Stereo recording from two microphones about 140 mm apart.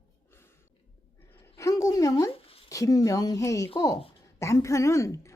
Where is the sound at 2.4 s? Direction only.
45° left (ahead or behind).